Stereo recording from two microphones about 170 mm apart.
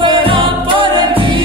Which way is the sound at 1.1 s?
30° right (ahead or behind).